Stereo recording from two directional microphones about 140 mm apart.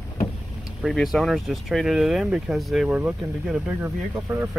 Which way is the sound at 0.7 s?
Centre (ahead or behind).